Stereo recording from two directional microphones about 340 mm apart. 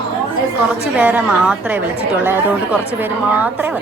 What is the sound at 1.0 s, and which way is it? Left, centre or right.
A woman's voice, centre.